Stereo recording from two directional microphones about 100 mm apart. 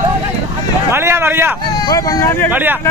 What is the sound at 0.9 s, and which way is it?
Speech, 25° right (ahead or behind).